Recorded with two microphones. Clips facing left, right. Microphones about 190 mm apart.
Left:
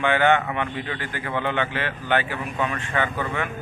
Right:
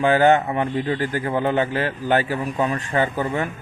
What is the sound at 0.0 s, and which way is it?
A man's voice, 40° right (ahead or behind).